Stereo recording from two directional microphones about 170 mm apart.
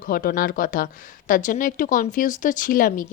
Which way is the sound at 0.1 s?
60° left (ahead or behind).